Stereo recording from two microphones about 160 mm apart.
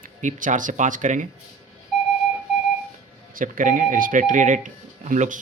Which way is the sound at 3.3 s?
60° right (ahead or behind).